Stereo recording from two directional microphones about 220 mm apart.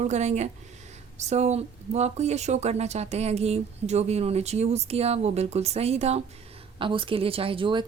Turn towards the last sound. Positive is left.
turn(degrees=-20)  # may be behind; listen again after turning